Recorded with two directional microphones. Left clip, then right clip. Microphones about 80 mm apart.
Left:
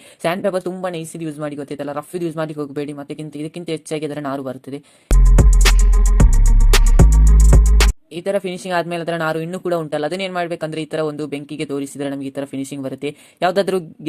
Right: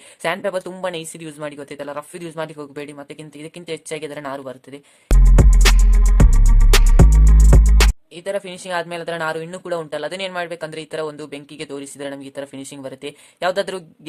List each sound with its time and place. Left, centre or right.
0.2 s a woman's voice: centre
0.8 s a woman's voice: centre
2.1 s speech: left
5.0 s music: centre
8.1 s speech: left